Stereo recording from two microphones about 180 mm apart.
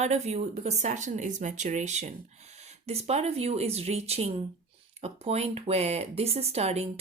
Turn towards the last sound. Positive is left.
turn(degrees=-35)  # may be behind; listen again after turning